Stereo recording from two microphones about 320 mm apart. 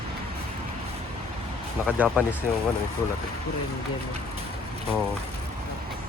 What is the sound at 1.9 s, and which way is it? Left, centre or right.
Speech, centre.